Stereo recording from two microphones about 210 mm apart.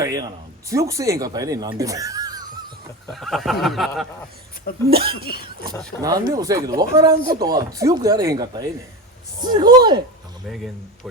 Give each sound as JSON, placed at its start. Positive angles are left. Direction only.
{"t": 0.0, "sound": "speech", "side_deg": -15}
{"t": 3.1, "sound": "speech", "side_deg": 0}
{"t": 4.7, "sound": "speech", "side_deg": 45}
{"t": 6.0, "sound": "speech", "side_deg": -15}